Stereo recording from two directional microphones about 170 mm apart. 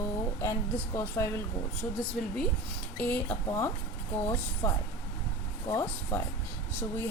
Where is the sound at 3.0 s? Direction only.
10° left (ahead or behind).